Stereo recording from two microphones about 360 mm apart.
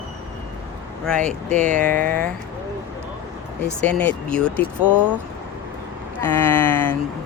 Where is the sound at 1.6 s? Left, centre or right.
Right.